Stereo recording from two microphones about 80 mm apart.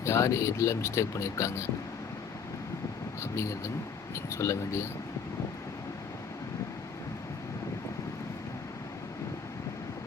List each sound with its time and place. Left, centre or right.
0.0 s speech: left
3.2 s speech: left